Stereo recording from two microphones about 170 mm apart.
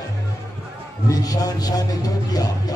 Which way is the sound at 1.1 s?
20° left (ahead or behind).